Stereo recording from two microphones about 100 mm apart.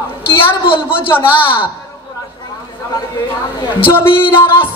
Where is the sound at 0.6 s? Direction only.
60° left (ahead or behind).